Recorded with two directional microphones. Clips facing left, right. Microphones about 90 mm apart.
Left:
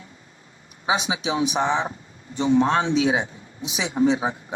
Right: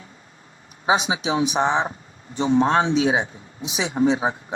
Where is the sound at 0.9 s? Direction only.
35° right (ahead or behind).